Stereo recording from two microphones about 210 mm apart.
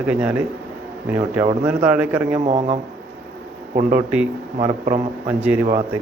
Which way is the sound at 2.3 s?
25° right (ahead or behind).